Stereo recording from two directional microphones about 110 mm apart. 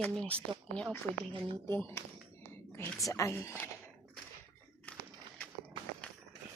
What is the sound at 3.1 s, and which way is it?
Speech, 30° left (ahead or behind).